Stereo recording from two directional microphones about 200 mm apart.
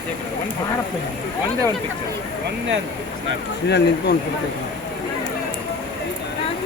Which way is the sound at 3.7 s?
55° left (ahead or behind).